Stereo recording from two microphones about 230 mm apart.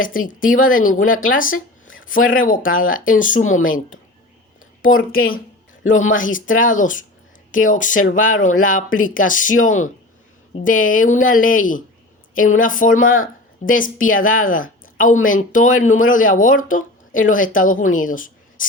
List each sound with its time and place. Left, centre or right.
0.0 s speech: left
0.9 s speech: left
1.3 s speech: left
1.5 s a sound: left
2.1 s speech: left
4.8 s speech: left